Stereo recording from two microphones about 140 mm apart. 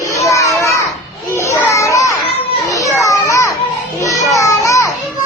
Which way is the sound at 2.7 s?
25° left (ahead or behind).